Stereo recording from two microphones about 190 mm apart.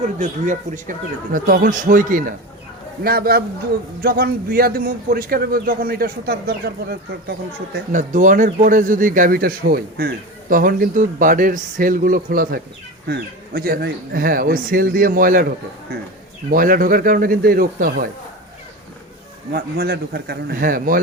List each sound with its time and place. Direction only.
0.2 s speech: 40° right (ahead or behind); by 7.8 s 60° right (ahead or behind)
7.9 s speech: 40° right (ahead or behind)
16.5 s speech: 50° right (ahead or behind)
19.5 s a man's voice: 55° right (ahead or behind)